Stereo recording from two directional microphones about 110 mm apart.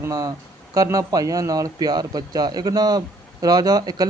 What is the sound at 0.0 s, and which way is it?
Speech, 35° right (ahead or behind).